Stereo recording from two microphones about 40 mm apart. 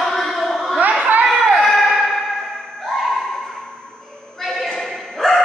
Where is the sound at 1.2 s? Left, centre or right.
Centre.